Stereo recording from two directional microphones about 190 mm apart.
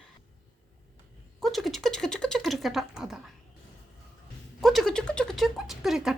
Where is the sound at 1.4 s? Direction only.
Centre (ahead or behind).